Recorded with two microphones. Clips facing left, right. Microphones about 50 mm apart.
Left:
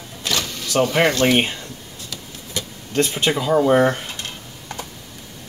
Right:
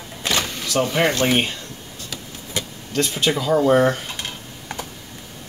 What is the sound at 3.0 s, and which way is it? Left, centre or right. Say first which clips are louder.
Speech: left 1 dB; centre.